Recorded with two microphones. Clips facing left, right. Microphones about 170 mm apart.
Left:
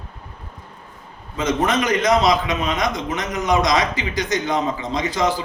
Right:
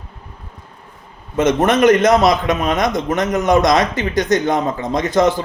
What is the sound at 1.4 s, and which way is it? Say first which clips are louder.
A man's voice: right 7 dB; 55° right (ahead or behind).